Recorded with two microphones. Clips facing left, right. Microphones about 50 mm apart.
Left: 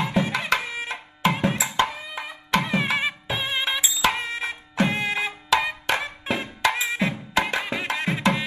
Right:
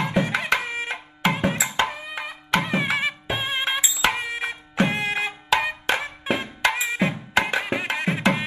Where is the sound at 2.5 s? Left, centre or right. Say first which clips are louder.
Even; right.